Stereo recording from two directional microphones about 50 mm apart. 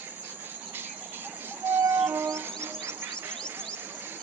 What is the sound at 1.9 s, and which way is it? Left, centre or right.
Music, right.